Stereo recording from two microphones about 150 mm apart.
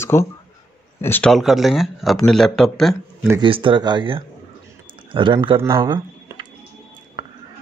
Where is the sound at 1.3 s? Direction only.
Centre (ahead or behind).